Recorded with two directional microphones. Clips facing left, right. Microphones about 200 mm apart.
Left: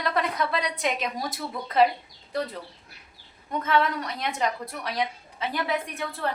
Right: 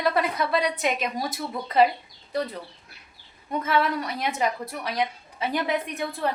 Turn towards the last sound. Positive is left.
turn(degrees=-15)  # may be behind; listen again after turning